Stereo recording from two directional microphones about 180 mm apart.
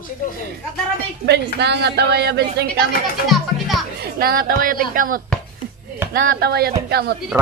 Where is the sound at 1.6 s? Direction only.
70° right (ahead or behind).